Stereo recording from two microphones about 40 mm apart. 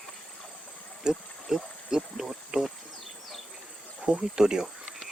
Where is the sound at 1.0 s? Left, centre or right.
Centre.